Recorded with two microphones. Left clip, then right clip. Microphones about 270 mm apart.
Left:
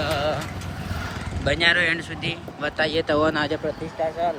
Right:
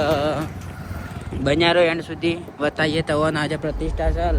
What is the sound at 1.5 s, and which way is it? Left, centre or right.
Speech, centre.